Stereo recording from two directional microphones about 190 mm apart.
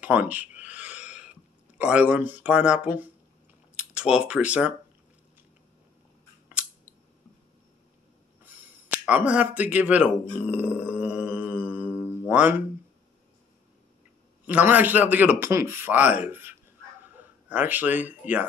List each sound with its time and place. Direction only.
0.0 s speech: 10° right (ahead or behind)
9.0 s speech: 5° right (ahead or behind)
14.4 s a man's voice: 10° right (ahead or behind)